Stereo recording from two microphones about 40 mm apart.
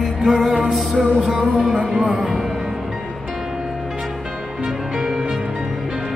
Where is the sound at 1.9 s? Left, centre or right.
Right.